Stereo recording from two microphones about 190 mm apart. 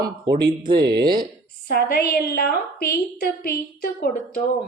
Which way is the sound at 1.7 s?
55° left (ahead or behind).